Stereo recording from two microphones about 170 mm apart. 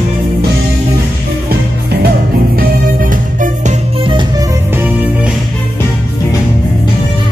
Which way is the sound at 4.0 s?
30° right (ahead or behind).